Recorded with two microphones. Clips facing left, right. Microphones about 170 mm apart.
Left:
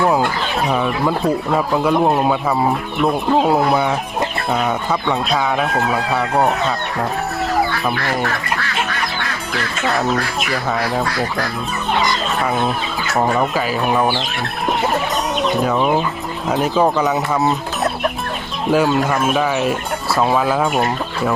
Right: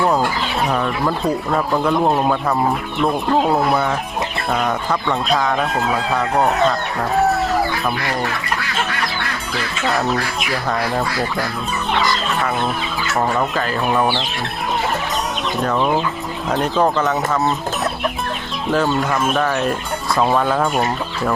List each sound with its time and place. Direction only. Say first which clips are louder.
0.7 s speech: left 3 dB; 5° left (ahead or behind)
9.8 s speech: left 1 dB; centre (ahead or behind)
13.6 s speech: left 1 dB; 5° left (ahead or behind)
15.6 s speech: right 2 dB; 10° left (ahead or behind)
17.1 s speech: left 1 dB; 15° left (ahead or behind)
18.7 s speech: left 3 dB; 10° left (ahead or behind)